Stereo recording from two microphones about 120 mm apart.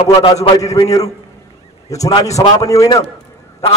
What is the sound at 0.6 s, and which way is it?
A man's voice, 25° left (ahead or behind).